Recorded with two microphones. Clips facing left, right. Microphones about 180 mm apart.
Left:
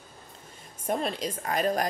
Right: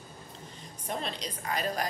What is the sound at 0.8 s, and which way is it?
A woman's voice, 50° left (ahead or behind).